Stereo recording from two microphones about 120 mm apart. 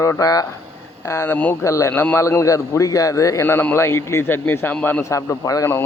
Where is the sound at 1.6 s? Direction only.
25° left (ahead or behind).